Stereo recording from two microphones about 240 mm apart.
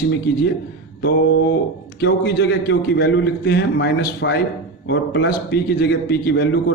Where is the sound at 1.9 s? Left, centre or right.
Left.